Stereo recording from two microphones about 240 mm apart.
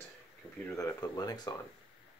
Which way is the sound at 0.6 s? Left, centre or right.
Centre.